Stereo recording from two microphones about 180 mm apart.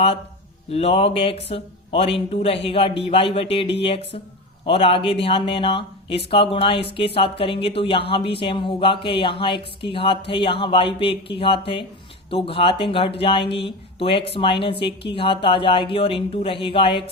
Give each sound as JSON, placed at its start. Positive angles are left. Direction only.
{"t": 0.7, "sound": "a woman's voice", "side_deg": 30}